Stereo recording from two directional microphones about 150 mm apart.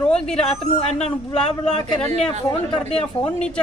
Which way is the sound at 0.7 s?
45° left (ahead or behind).